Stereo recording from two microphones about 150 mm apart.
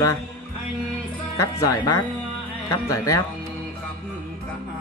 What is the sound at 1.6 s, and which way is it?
Speech, 20° left (ahead or behind).